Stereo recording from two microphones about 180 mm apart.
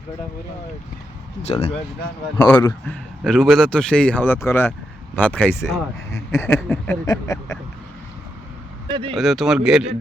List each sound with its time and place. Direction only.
1.4 s speech: 35° left (ahead or behind)
2.3 s a man's voice: 15° left (ahead or behind)
8.9 s speech: 30° right (ahead or behind)
9.1 s speech: centre (ahead or behind)